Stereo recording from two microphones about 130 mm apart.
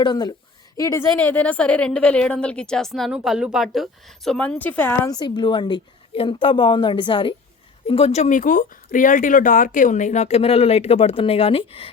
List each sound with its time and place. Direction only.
0.0 s a woman's voice: 30° left (ahead or behind)
1.3 s a woman's voice: 10° left (ahead or behind)
5.0 s a woman's voice: 35° left (ahead or behind)